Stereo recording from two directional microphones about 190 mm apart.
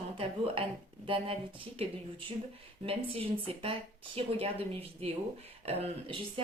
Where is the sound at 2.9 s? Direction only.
30° right (ahead or behind).